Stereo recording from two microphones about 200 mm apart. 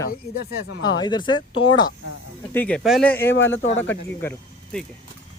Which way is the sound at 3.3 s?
70° left (ahead or behind).